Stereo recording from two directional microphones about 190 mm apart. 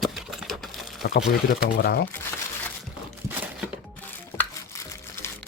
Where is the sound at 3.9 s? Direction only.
10° left (ahead or behind).